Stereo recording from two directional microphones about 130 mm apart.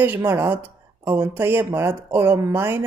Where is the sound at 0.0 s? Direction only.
15° right (ahead or behind).